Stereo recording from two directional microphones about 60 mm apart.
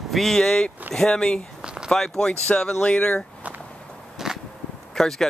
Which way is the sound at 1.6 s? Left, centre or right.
Centre.